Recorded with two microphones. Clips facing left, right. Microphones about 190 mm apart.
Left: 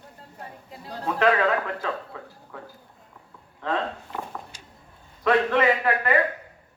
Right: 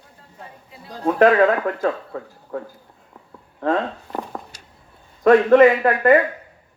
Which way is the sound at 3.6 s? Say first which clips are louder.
Right 6 dB; 45° right (ahead or behind).